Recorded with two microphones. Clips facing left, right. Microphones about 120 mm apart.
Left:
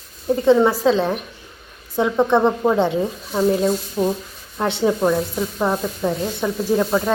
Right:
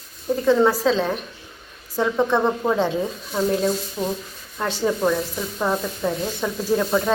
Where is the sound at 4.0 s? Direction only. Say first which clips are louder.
Left 9 dB; 20° left (ahead or behind).